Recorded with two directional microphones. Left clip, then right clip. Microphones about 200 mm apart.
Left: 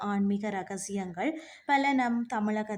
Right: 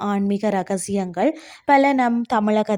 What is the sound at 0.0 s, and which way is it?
Speech, 35° right (ahead or behind).